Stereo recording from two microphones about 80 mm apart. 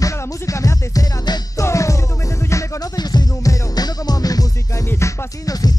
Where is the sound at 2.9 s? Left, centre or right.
Left.